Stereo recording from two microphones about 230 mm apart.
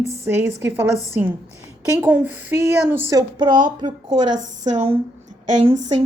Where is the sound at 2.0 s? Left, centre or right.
Centre.